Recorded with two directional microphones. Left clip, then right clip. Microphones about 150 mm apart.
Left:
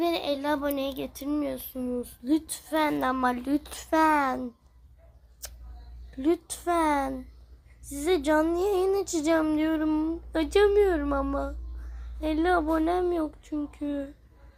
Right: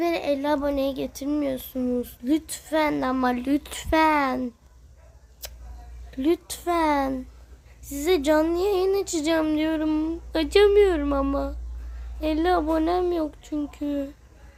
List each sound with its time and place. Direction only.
0.0 s a woman's voice: 15° right (ahead or behind)
6.1 s a woman's voice: 15° right (ahead or behind)